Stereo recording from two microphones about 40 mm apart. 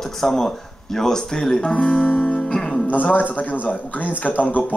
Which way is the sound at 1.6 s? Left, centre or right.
Left.